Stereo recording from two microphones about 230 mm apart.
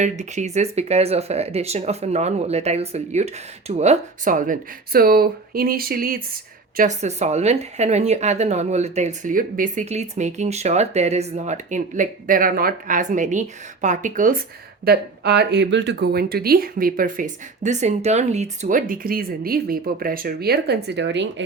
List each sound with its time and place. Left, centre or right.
0.0 s speech: right
14.8 s speech: right